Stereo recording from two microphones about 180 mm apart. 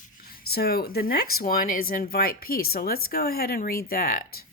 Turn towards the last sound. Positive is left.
turn(degrees=55)  # may be behind; listen again after turning